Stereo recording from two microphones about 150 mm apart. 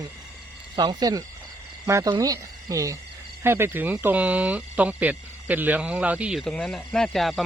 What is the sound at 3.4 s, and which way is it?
Speech, 15° right (ahead or behind).